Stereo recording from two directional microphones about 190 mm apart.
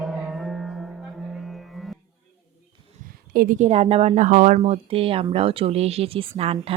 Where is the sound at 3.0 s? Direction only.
45° right (ahead or behind).